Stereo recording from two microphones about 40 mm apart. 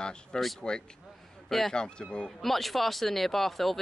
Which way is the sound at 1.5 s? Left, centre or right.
Centre.